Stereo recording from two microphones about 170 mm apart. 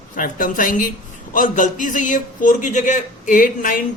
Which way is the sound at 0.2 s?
55° left (ahead or behind).